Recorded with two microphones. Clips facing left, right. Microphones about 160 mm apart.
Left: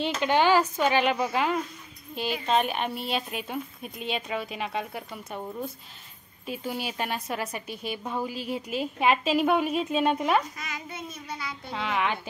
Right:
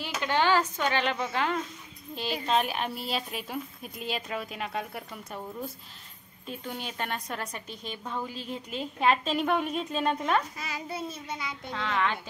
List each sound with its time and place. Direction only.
0.2 s a woman's voice: 15° left (ahead or behind)
2.4 s a woman's voice: centre (ahead or behind)
6.4 s a woman's voice: 5° left (ahead or behind)
10.6 s a child's voice: 30° right (ahead or behind)
11.7 s a woman's voice: 15° left (ahead or behind)